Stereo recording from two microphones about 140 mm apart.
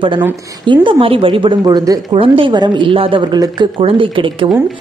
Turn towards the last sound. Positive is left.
turn(degrees=-40)  # may be behind; listen again after turning